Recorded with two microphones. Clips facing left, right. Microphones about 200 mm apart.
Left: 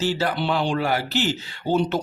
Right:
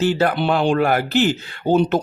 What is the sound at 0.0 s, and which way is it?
Speech, 55° right (ahead or behind).